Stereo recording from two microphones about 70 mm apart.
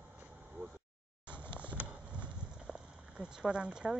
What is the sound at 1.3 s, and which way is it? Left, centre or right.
Horse, centre.